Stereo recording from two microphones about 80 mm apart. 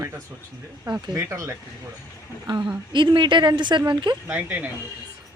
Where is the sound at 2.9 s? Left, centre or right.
Right.